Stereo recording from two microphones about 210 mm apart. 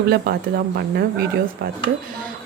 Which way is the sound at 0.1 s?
50° right (ahead or behind).